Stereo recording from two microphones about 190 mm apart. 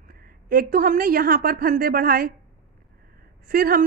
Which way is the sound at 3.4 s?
50° right (ahead or behind).